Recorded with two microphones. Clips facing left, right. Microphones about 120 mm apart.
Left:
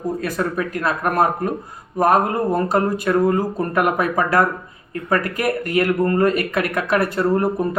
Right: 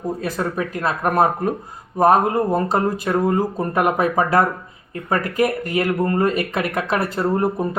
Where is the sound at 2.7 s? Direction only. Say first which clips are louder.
Left 2 dB; 25° right (ahead or behind).